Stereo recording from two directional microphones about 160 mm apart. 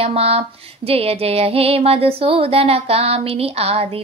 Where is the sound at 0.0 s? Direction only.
40° right (ahead or behind).